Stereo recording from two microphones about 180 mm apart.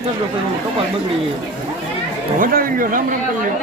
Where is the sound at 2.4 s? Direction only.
50° right (ahead or behind).